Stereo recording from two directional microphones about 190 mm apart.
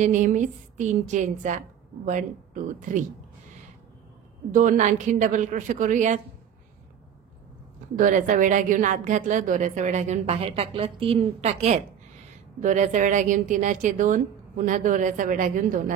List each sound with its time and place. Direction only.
0.0 s a woman's voice: 40° right (ahead or behind)
4.5 s a woman's voice: 45° right (ahead or behind)
8.0 s a woman's voice: 45° right (ahead or behind)